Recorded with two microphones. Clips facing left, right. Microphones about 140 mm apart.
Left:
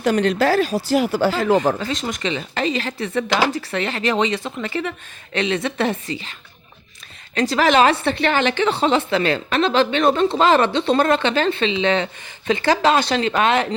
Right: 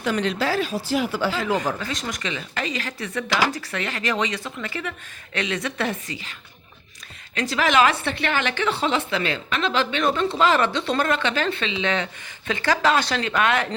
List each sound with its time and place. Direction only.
0.0 s speech: 45° left (ahead or behind)
1.5 s a woman's voice: 25° left (ahead or behind)
7.3 s a woman's voice: 35° left (ahead or behind)